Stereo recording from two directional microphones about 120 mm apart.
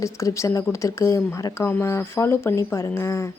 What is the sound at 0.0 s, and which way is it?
Speech, 25° left (ahead or behind).